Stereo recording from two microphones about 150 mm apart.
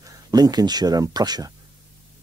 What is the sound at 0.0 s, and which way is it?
Speech, 25° right (ahead or behind).